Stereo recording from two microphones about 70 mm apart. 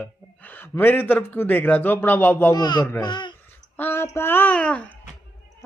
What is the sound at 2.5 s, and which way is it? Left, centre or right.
Speech, left.